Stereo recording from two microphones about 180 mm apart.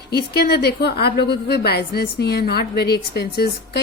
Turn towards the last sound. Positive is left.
turn(degrees=60)  # may be behind; listen again after turning